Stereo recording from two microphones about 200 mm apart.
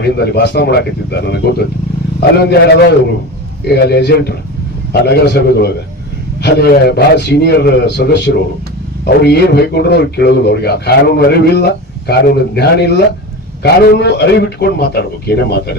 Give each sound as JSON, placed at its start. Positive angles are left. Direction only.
{"t": 0.0, "sound": "a man's voice", "side_deg": 55}